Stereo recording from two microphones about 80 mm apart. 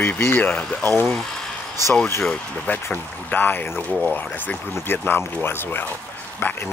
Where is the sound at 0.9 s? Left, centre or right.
Left.